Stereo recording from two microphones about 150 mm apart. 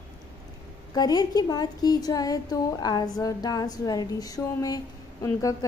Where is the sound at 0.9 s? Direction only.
25° left (ahead or behind).